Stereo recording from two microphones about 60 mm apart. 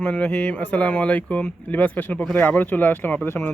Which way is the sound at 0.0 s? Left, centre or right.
Left.